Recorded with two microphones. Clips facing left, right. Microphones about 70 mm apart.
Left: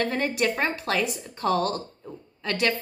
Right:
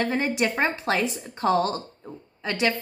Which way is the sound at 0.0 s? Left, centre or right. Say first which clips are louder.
Right 1 dB; right.